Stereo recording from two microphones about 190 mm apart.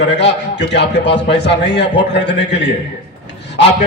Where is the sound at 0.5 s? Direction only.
65° left (ahead or behind).